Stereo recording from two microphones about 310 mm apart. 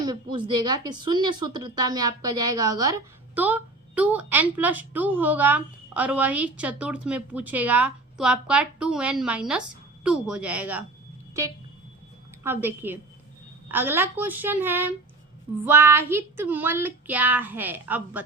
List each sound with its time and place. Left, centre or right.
0.0 s speech: centre
12.4 s speech: centre